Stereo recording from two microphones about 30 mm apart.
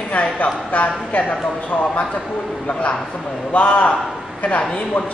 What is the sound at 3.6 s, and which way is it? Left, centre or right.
Speech, left.